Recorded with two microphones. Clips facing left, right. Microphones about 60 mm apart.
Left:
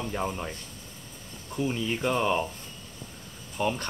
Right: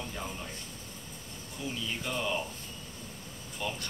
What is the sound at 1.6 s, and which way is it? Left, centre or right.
Speech, left.